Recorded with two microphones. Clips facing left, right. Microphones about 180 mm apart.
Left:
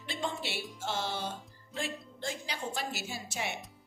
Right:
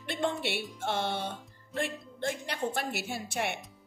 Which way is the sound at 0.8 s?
60° right (ahead or behind).